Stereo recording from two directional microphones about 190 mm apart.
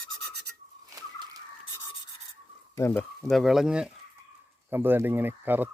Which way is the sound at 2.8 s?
15° left (ahead or behind).